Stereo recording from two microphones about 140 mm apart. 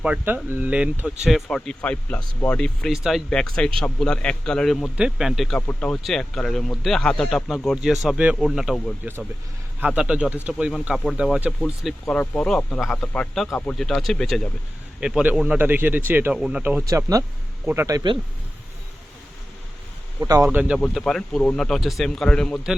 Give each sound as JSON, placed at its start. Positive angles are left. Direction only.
{"t": 0.0, "sound": "speech", "side_deg": -5}
{"t": 1.2, "sound": "speech", "side_deg": 0}
{"t": 5.5, "sound": "speech", "side_deg": 10}
{"t": 9.8, "sound": "speech", "side_deg": -5}
{"t": 12.0, "sound": "speech", "side_deg": 10}
{"t": 15.0, "sound": "speech", "side_deg": -10}
{"t": 17.7, "sound": "speech", "side_deg": -20}
{"t": 20.1, "sound": "speech", "side_deg": -25}
{"t": 20.5, "sound": "speech", "side_deg": -10}
{"t": 20.9, "sound": "speech", "side_deg": 5}